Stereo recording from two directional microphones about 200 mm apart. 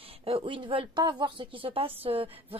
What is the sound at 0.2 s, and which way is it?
Speech, 25° right (ahead or behind).